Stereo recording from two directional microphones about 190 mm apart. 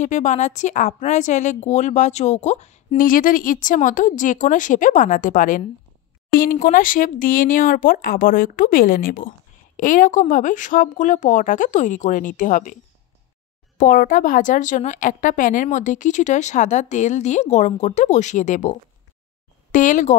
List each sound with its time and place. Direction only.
0.0 s a woman's voice: 40° left (ahead or behind)
6.6 s speech: 45° left (ahead or behind)
13.7 s a woman's voice: 45° left (ahead or behind)
19.7 s speech: 45° left (ahead or behind)